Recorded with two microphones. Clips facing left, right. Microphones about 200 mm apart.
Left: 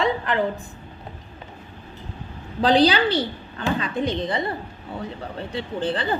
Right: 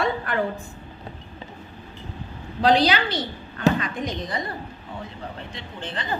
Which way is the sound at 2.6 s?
30° left (ahead or behind).